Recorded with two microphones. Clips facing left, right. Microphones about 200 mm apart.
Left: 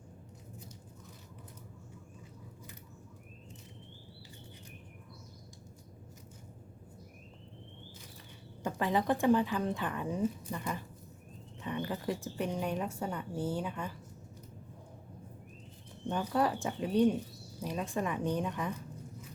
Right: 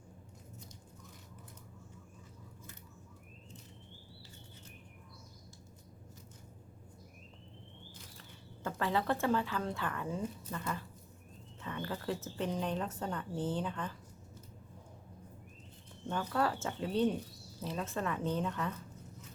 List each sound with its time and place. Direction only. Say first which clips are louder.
8.6 s a woman's voice: left 3 dB; 15° left (ahead or behind)
16.0 s a woman's voice: left 3 dB; 15° left (ahead or behind)